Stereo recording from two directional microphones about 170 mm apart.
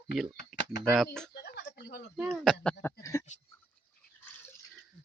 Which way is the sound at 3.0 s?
15° left (ahead or behind).